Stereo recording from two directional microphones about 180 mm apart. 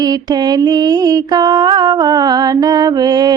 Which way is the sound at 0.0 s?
20° right (ahead or behind).